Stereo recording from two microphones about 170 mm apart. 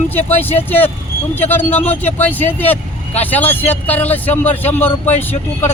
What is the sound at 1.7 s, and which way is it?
Speech, 40° left (ahead or behind).